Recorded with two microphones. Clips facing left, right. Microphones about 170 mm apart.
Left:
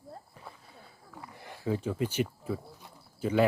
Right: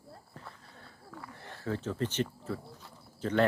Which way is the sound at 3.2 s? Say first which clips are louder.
Left 2 dB; 10° left (ahead or behind).